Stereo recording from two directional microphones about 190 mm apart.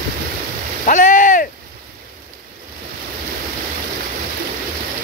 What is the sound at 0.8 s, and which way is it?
Rowboat, 45° left (ahead or behind).